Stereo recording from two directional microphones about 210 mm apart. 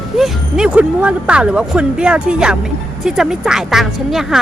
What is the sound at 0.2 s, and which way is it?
Speech, 5° right (ahead or behind).